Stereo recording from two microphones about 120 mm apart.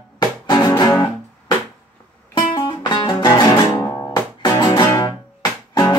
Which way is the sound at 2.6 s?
40° left (ahead or behind).